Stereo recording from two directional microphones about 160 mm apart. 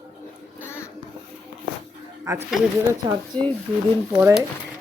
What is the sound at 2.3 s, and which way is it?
Speech, 20° right (ahead or behind).